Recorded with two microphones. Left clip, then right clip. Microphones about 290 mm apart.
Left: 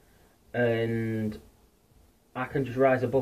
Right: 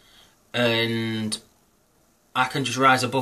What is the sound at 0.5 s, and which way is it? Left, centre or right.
Speech, centre.